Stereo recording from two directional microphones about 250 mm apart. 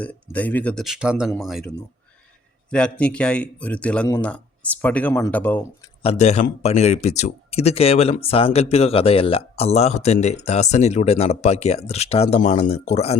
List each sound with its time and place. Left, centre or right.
0.0 s a man's voice: centre
6.0 s speech: left